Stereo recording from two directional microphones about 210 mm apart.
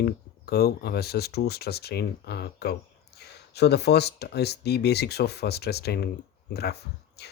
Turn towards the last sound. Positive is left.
turn(degrees=50)  # may be behind; listen again after turning